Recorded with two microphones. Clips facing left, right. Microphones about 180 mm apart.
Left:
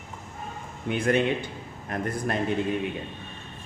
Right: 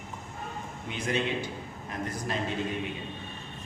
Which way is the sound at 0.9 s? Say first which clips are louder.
Left 7 dB; 55° left (ahead or behind).